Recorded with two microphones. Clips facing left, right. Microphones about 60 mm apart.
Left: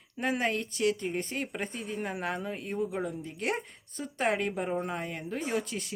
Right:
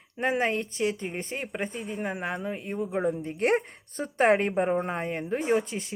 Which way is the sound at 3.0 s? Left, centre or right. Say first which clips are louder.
Right 7 dB; right.